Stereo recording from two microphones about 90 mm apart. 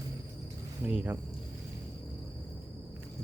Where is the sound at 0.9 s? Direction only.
20° right (ahead or behind).